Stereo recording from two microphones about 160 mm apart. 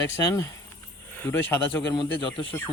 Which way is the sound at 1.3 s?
10° left (ahead or behind).